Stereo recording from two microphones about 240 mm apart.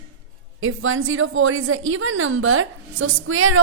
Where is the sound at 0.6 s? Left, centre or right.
Right.